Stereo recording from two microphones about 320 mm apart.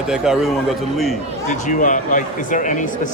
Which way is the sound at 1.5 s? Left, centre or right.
Left.